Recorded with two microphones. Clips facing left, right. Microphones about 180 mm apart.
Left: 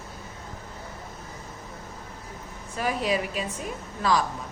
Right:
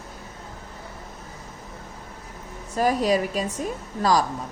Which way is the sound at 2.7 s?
40° right (ahead or behind).